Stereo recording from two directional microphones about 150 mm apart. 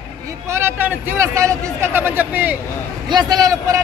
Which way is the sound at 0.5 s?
15° right (ahead or behind).